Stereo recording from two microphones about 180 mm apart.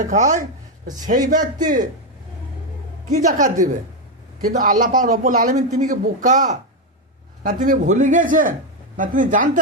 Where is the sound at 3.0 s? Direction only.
45° right (ahead or behind).